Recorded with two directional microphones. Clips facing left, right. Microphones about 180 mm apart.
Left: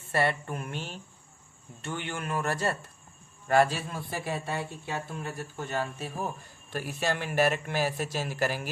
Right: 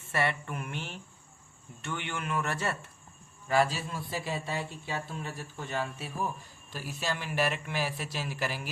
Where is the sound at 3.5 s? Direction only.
55° left (ahead or behind).